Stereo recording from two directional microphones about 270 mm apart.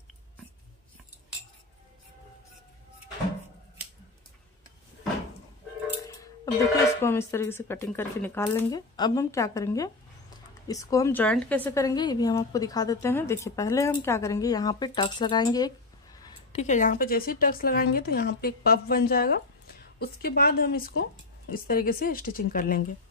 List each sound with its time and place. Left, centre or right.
6.0 s a woman's voice: centre
16.5 s a woman's voice: left